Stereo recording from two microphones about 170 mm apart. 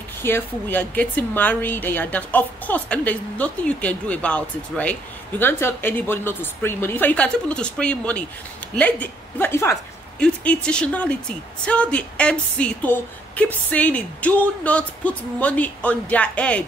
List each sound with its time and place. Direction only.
0.2 s speech: 10° left (ahead or behind)